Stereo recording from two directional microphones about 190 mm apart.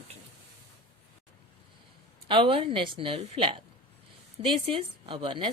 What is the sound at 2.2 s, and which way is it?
Speech, 25° right (ahead or behind).